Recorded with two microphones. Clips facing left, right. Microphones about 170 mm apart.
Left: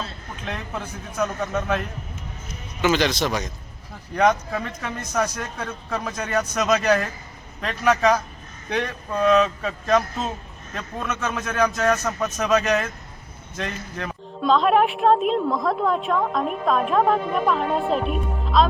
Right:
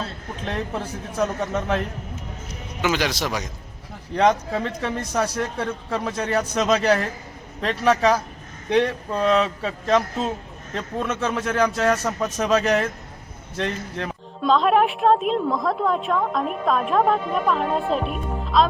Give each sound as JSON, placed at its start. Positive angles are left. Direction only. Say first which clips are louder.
{"t": 0.4, "sound": "speech", "louder": "right 4 dB", "side_deg": -30}
{"t": 2.8, "sound": "a man's voice", "louder": "left 3 dB", "side_deg": -10}
{"t": 4.1, "sound": "speech", "louder": "right 1 dB", "side_deg": -25}
{"t": 14.4, "sound": "a woman's voice", "louder": "even", "side_deg": 0}